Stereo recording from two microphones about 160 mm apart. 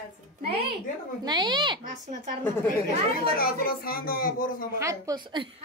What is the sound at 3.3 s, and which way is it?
Speech, 70° left (ahead or behind).